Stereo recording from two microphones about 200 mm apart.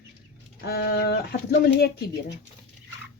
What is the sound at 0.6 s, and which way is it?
Speech, 55° left (ahead or behind).